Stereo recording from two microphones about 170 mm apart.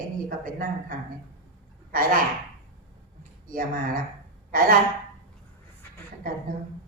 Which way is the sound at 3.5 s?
55° right (ahead or behind).